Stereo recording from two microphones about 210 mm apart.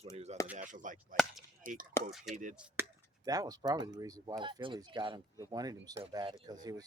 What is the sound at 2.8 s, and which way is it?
Chop, 10° right (ahead or behind).